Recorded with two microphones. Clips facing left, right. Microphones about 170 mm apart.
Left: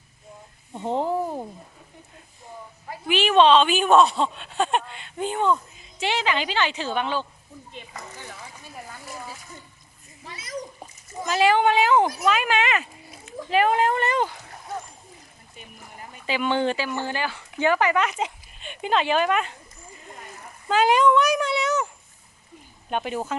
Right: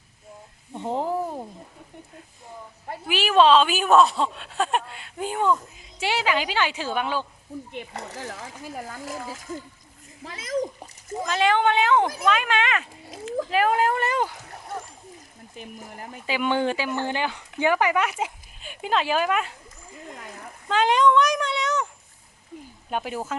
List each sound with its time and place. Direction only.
0.9 s speech: centre (ahead or behind)
3.1 s a woman's voice: 5° right (ahead or behind)
7.7 s speech: 60° right (ahead or behind); by 10.7 s 90° right
11.3 s speech: 10° left (ahead or behind)
13.1 s a sound: 90° right
13.5 s speech: centre (ahead or behind)
16.2 s a woman's voice: 10° right (ahead or behind)
20.1 s a sound: 60° right (ahead or behind)
20.7 s speech: 5° left (ahead or behind)
22.9 s speech: 5° right (ahead or behind)